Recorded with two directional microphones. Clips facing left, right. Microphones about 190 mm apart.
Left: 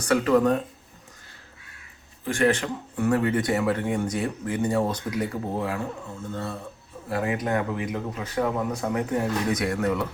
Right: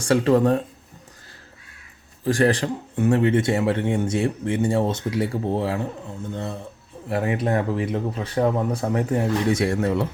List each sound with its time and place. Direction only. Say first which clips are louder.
0.0 s speech: right 2 dB; 30° right (ahead or behind)
2.2 s speech: right 3 dB; 35° right (ahead or behind)